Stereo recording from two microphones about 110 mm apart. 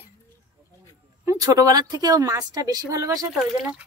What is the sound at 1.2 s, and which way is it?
A woman's voice, 35° right (ahead or behind).